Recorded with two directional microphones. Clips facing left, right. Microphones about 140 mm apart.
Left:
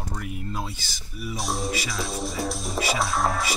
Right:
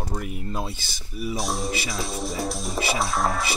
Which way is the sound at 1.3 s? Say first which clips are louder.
Left 1 dB; centre (ahead or behind).